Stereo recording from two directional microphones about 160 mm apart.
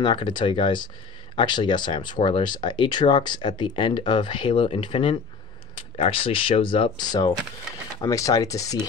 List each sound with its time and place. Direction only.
0.0 s speech: 30° left (ahead or behind)